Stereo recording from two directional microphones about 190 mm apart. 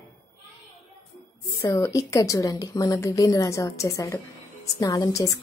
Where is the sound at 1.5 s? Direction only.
15° left (ahead or behind).